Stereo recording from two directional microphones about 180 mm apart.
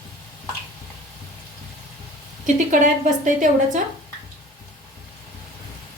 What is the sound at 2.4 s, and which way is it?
A woman's voice, 45° right (ahead or behind).